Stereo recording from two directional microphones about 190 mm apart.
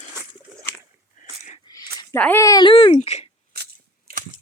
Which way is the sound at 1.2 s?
40° left (ahead or behind).